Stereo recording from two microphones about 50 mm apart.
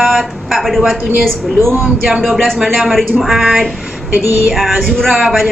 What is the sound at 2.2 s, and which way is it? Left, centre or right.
A woman's voice, centre.